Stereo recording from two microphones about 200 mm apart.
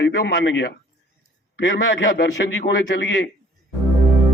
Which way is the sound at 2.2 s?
60° left (ahead or behind).